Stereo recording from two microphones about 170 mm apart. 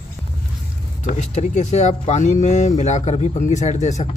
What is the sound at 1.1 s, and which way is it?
Speech, 45° left (ahead or behind).